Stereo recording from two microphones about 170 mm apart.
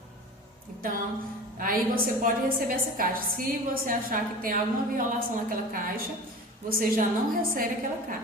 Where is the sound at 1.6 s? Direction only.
55° right (ahead or behind).